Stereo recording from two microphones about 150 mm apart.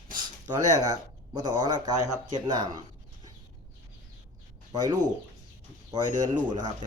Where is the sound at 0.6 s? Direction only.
25° right (ahead or behind).